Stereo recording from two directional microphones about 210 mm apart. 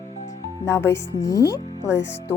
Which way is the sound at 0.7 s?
15° left (ahead or behind).